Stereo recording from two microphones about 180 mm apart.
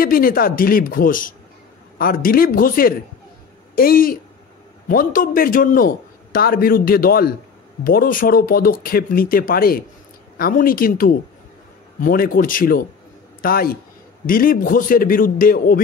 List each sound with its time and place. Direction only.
0.0 s a man's voice: 55° left (ahead or behind)